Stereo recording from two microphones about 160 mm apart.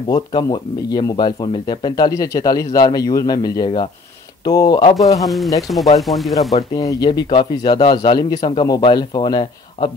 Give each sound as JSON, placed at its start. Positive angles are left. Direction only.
{"t": 0.1, "sound": "speech", "side_deg": 30}
{"t": 5.2, "sound": "speech", "side_deg": 0}
{"t": 6.5, "sound": "speech", "side_deg": 20}